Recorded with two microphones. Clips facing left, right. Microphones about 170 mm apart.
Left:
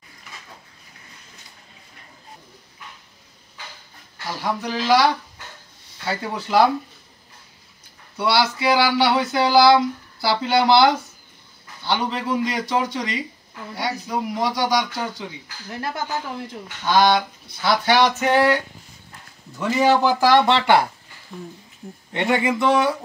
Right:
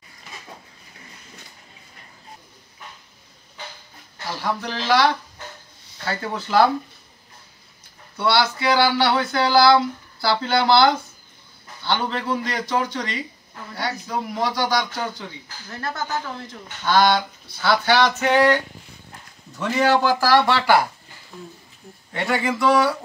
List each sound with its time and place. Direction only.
4.3 s speech: 5° left (ahead or behind)
8.2 s speech: 5° left (ahead or behind)
19.6 s speech: 10° left (ahead or behind)
22.6 s speech: 20° left (ahead or behind)